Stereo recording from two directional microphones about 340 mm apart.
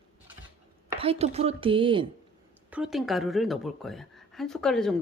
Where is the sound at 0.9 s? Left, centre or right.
Centre.